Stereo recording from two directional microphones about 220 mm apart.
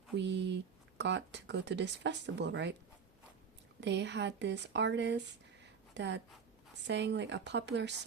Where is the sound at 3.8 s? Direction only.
50° right (ahead or behind).